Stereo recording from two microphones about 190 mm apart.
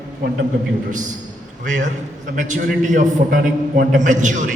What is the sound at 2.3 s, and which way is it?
A man's voice, 45° right (ahead or behind).